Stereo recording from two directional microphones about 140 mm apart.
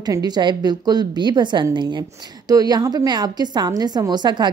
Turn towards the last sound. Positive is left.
turn(degrees=-30)  # may be behind; listen again after turning